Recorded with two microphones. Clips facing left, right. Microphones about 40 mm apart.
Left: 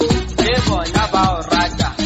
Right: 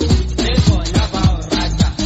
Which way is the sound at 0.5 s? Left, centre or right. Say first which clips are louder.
Left 1 dB; left.